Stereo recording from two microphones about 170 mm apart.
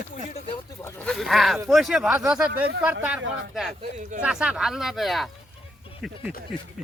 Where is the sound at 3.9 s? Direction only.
50° right (ahead or behind).